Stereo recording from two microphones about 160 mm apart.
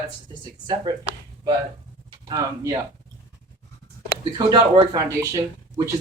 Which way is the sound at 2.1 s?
25° right (ahead or behind).